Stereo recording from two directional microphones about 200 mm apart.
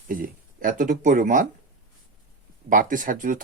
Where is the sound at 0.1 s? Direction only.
45° right (ahead or behind).